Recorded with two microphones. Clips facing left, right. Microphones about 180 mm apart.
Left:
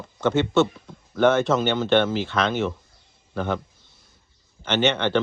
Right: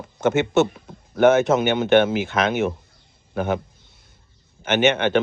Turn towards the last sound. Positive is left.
turn(degrees=-50)  # may be behind; listen again after turning